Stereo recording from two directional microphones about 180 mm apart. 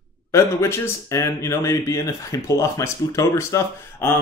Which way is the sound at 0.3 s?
15° left (ahead or behind).